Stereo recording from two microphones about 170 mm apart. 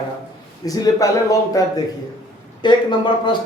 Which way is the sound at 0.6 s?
20° left (ahead or behind).